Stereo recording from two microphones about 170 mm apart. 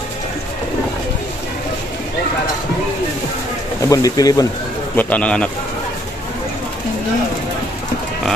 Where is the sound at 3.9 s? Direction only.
20° left (ahead or behind).